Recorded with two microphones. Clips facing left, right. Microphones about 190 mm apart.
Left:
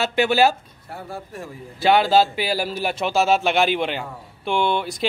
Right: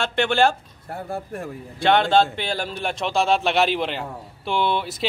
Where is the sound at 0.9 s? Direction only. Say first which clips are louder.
Right 3 dB; 55° right (ahead or behind).